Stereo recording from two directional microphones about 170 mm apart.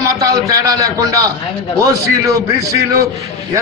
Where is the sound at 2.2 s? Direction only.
20° right (ahead or behind).